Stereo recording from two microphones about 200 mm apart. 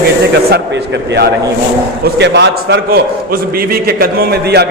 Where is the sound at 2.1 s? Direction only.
60° right (ahead or behind).